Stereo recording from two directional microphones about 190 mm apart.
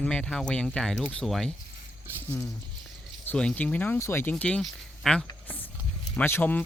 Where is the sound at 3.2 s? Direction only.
5° left (ahead or behind).